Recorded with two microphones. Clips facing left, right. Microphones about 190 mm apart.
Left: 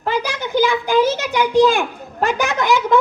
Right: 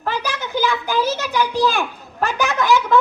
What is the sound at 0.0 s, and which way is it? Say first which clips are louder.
A child's voice: left 3 dB; 15° left (ahead or behind).